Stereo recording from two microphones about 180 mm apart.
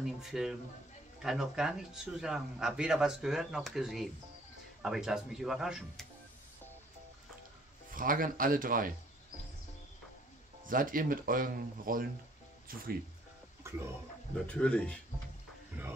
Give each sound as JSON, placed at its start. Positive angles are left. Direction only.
{"t": 0.2, "sound": "a man's voice", "side_deg": -5}
{"t": 7.9, "sound": "speech", "side_deg": -50}
{"t": 10.6, "sound": "speech", "side_deg": -50}
{"t": 13.7, "sound": "a sound", "side_deg": -15}
{"t": 14.5, "sound": "speech", "side_deg": 5}
{"t": 15.7, "sound": "music", "side_deg": -10}